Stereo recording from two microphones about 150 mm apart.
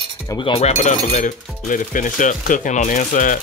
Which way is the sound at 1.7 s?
60° left (ahead or behind).